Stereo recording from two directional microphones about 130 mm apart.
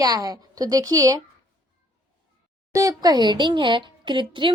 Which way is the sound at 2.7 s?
25° right (ahead or behind).